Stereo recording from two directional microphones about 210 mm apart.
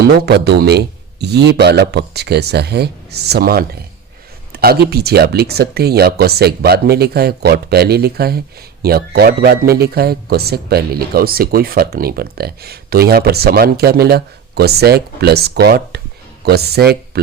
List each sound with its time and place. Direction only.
0.3 s speech: 50° right (ahead or behind)